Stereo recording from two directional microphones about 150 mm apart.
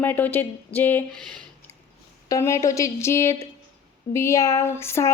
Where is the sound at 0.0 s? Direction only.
15° left (ahead or behind).